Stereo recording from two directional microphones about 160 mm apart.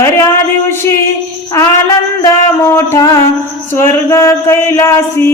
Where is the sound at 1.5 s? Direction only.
20° left (ahead or behind).